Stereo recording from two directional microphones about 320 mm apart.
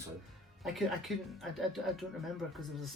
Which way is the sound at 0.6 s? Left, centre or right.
Centre.